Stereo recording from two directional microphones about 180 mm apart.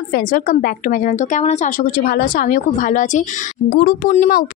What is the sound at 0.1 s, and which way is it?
A woman's voice, 50° left (ahead or behind).